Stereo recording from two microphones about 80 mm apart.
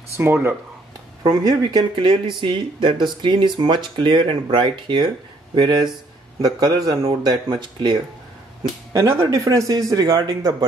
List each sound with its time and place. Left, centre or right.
0.2 s speech: right
1.2 s speech: right
6.4 s speech: right
8.9 s speech: right